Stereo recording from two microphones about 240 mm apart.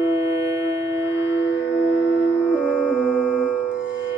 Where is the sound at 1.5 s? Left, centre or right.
Left.